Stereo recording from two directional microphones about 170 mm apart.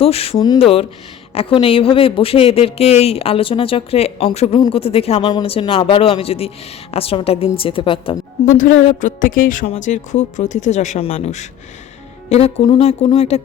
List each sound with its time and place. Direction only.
0.0 s speech: 35° left (ahead or behind)
0.3 s speech: 25° left (ahead or behind)
0.6 s speech: 35° left (ahead or behind)
8.9 s speech: 50° left (ahead or behind)